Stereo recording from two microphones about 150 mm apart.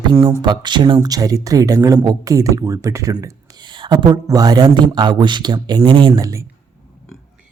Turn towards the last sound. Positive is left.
turn(degrees=-20)  # may be behind; listen again after turning